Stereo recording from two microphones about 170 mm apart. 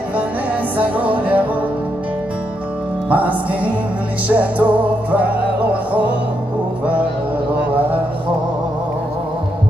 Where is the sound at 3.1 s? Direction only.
10° right (ahead or behind).